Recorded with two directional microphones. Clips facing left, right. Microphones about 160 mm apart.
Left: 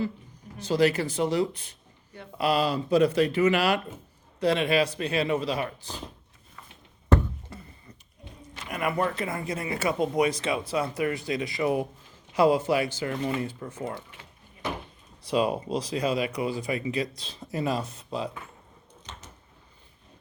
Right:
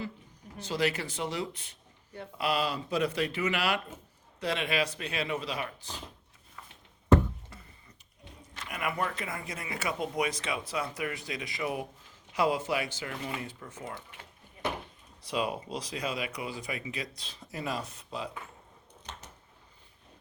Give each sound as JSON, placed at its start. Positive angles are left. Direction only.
{"t": 0.6, "sound": "speech", "side_deg": 40}
{"t": 7.5, "sound": "a sound", "side_deg": 30}
{"t": 8.7, "sound": "speech", "side_deg": 40}